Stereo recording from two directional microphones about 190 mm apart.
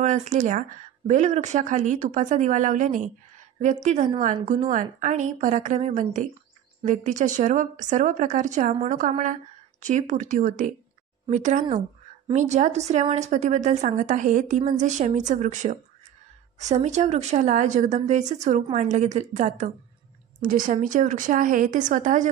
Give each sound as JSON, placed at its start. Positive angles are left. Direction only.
{"t": 0.0, "sound": "a woman's voice", "side_deg": -40}